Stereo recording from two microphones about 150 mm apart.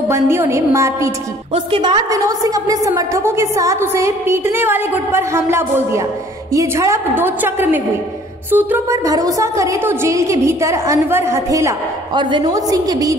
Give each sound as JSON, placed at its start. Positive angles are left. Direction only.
{"t": 0.1, "sound": "a woman's voice", "side_deg": -20}
{"t": 1.5, "sound": "a woman's voice", "side_deg": -35}